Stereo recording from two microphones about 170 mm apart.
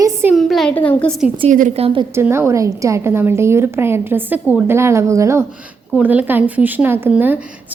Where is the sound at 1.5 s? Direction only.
50° right (ahead or behind).